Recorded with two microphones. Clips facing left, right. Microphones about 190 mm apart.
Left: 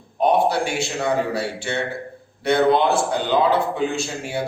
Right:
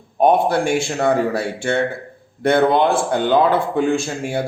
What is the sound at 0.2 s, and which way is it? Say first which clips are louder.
Speech: right 3 dB; 50° right (ahead or behind).